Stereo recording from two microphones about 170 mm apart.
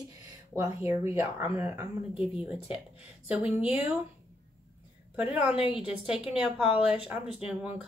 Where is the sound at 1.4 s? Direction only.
15° right (ahead or behind).